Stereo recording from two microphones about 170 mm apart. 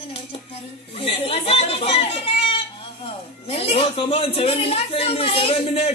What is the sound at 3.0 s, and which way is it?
Speech, 35° left (ahead or behind).